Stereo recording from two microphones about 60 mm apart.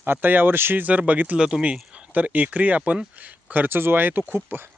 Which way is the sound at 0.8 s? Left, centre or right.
Right.